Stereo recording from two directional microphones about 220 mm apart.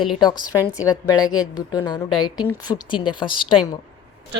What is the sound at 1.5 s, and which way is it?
A woman's voice, 20° left (ahead or behind).